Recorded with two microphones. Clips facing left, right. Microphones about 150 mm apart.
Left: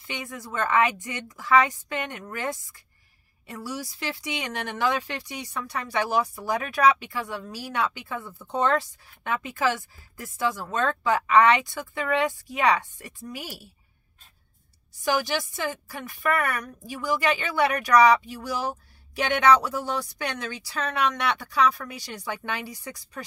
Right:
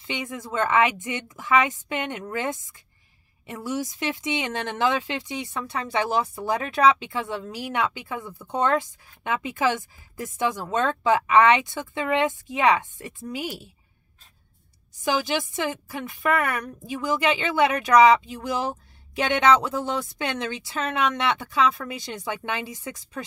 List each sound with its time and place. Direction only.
0.0 s speech: 20° right (ahead or behind)
15.0 s speech: 20° right (ahead or behind)